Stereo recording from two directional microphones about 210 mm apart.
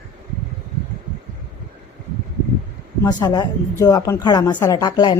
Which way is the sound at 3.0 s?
20° left (ahead or behind).